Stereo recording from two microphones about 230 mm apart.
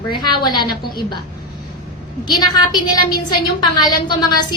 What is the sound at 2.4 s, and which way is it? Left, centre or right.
A woman's voice, centre.